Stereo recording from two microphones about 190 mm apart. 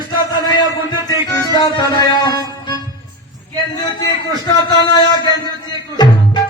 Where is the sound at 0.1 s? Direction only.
20° left (ahead or behind).